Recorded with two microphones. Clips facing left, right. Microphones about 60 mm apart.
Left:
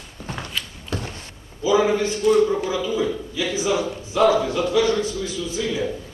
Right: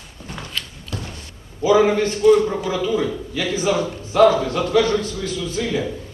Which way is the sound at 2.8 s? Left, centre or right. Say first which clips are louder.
Right 2 dB; right.